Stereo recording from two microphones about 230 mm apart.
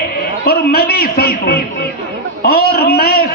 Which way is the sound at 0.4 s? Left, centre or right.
Left.